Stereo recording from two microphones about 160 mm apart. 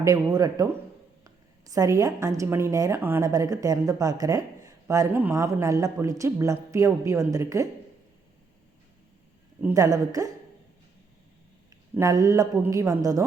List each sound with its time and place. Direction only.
0.0 s a woman's voice: 20° right (ahead or behind)
9.7 s a woman's voice: 20° right (ahead or behind)
11.9 s a woman's voice: 20° right (ahead or behind)